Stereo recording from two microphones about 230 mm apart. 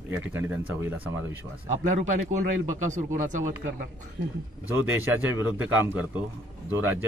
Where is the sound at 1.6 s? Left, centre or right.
Right.